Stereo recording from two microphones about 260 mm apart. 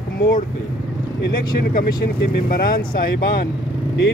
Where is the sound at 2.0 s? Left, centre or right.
Left.